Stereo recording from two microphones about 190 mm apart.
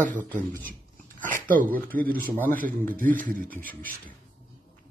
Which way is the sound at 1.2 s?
45° right (ahead or behind).